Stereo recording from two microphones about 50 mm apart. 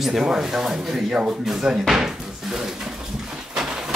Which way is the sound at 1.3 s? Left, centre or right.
Centre.